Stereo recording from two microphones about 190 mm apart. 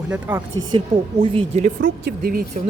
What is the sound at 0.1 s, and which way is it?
Speech, 10° right (ahead or behind).